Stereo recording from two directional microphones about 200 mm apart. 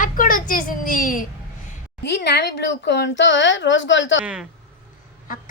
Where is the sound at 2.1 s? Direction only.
55° left (ahead or behind).